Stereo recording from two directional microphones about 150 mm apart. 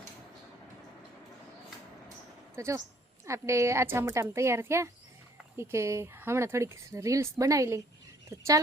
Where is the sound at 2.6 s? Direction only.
20° right (ahead or behind).